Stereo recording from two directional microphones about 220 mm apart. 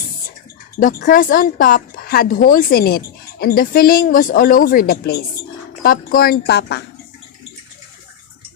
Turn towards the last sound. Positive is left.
turn(degrees=50)  # may be behind; listen again after turning